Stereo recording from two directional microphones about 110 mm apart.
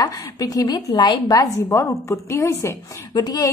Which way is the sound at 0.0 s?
35° left (ahead or behind).